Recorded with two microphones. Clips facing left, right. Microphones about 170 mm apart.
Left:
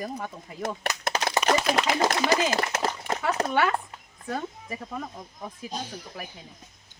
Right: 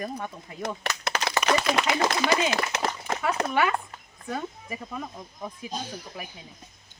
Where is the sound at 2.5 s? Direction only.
45° left (ahead or behind).